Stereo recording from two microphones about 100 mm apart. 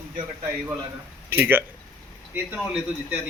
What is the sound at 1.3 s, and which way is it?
Speech, 20° right (ahead or behind).